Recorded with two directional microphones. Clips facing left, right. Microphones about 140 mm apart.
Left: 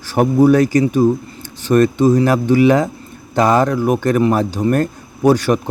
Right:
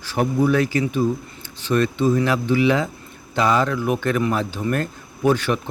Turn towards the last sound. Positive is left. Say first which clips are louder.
# left 6 dB
turn(degrees=40)  # may be behind; listen again after turning